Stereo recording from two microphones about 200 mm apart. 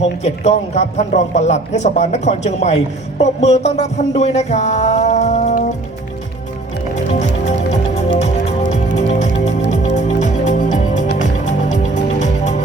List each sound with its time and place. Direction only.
0.0 s a man's voice: 30° left (ahead or behind)
3.2 s a sound: 35° left (ahead or behind)
7.1 s music: 35° left (ahead or behind)